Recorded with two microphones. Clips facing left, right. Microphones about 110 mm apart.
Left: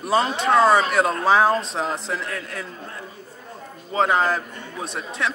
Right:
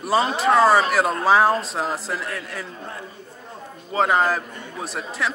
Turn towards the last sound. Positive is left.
turn(degrees=0)  # may be behind; listen again after turning